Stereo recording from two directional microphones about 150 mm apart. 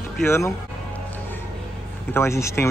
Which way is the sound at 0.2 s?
15° left (ahead or behind).